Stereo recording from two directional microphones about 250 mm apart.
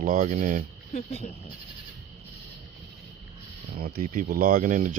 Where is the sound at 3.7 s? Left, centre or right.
Right.